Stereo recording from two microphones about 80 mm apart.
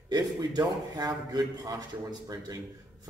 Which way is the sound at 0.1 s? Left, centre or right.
Right.